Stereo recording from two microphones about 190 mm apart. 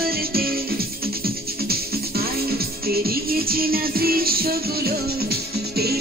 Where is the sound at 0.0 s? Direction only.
50° right (ahead or behind).